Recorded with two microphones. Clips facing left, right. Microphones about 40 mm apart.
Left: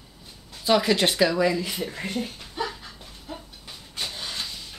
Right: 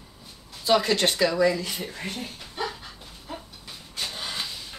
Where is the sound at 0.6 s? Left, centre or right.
Centre.